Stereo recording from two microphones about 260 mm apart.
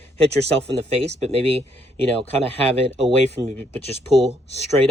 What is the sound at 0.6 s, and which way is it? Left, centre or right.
Speech, right.